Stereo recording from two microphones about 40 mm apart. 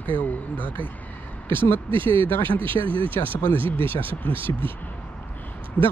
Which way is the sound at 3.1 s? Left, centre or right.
Left.